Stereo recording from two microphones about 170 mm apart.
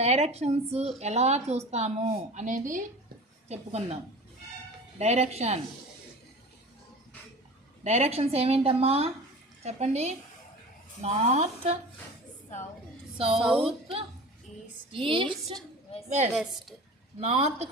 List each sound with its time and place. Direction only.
0.0 s a woman's voice: 40° right (ahead or behind)
3.5 s a woman's voice: 40° right (ahead or behind)
4.9 s a woman's voice: 40° right (ahead or behind)
7.9 s a woman's voice: 40° right (ahead or behind)
13.1 s speech: 35° right (ahead or behind)
14.9 s a woman's voice: 30° right (ahead or behind)
16.0 s a woman's voice: 40° right (ahead or behind)
16.3 s a woman's voice: centre (ahead or behind)
17.2 s a woman's voice: 40° right (ahead or behind)